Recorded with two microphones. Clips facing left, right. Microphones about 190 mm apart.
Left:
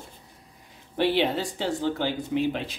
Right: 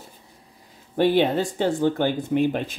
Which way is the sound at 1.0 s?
50° right (ahead or behind).